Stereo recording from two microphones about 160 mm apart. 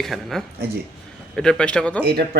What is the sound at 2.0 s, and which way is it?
Speech, 85° right.